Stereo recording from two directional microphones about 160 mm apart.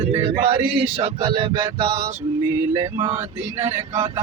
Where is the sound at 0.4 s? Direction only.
35° right (ahead or behind).